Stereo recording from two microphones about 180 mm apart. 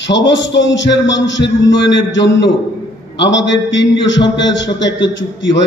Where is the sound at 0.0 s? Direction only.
85° left.